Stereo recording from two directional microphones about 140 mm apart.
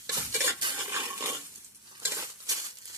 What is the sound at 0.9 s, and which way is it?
Stir, 20° right (ahead or behind).